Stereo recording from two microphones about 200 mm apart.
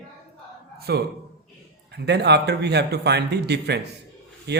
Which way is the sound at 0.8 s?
55° right (ahead or behind).